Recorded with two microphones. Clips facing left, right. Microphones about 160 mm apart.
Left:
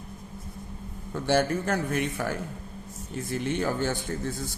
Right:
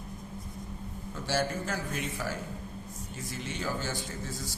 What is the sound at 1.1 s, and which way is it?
A man's voice, 60° left (ahead or behind).